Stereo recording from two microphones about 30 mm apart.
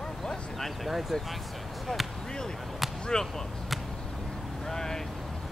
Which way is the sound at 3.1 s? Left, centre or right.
Left.